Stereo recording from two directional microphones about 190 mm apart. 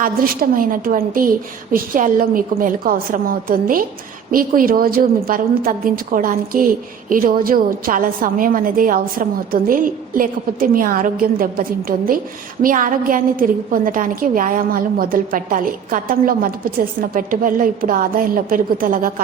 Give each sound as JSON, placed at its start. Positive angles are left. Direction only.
{"t": 0.0, "sound": "a woman's voice", "side_deg": -50}